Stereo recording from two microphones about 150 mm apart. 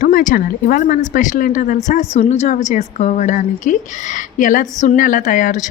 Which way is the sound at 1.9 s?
50° left (ahead or behind).